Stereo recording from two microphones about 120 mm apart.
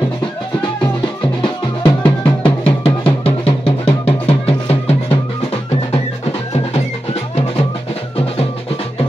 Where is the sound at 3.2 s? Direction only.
55° left (ahead or behind).